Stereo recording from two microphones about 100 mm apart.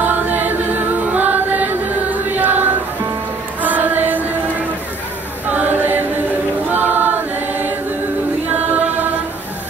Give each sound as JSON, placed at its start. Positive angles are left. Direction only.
{"t": 0.0, "sound": "choir", "side_deg": -20}
{"t": 3.6, "sound": "music", "side_deg": -20}
{"t": 5.5, "sound": "choir", "side_deg": -20}